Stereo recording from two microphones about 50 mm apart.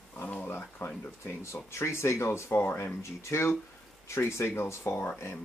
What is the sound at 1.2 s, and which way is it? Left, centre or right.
Speech, left.